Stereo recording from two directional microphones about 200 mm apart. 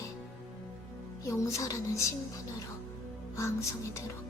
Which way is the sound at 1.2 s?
15° left (ahead or behind).